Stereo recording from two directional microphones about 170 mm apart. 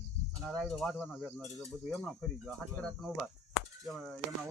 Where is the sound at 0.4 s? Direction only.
5° left (ahead or behind).